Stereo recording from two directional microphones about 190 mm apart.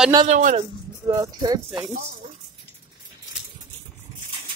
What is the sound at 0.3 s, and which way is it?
Speech, 45° right (ahead or behind).